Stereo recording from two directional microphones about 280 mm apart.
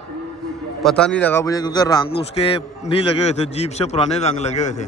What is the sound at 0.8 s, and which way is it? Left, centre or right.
A man's voice, centre.